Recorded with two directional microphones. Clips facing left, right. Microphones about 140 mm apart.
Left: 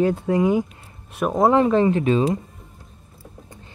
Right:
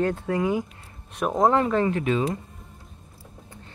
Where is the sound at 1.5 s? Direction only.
20° left (ahead or behind).